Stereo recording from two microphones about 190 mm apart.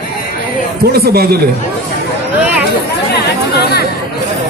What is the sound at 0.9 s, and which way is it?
Speech, 55° right (ahead or behind).